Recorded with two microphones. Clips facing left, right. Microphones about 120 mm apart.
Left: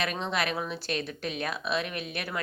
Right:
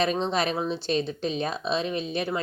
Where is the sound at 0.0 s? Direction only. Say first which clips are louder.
Right 5 dB; 30° right (ahead or behind).